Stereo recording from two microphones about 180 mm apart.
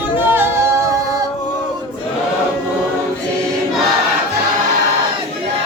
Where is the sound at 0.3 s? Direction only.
10° right (ahead or behind).